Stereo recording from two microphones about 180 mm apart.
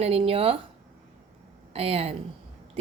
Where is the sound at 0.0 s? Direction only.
35° right (ahead or behind).